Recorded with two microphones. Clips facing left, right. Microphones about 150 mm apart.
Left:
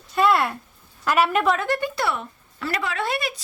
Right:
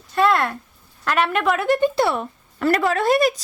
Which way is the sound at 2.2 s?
45° right (ahead or behind).